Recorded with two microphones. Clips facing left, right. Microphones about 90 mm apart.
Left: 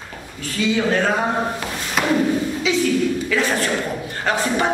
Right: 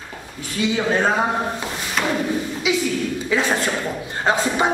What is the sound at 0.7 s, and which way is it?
Speech, 25° right (ahead or behind).